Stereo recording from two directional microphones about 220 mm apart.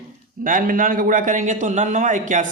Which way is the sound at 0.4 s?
40° right (ahead or behind).